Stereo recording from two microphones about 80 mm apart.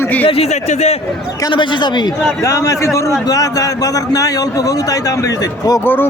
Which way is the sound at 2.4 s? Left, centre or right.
Left.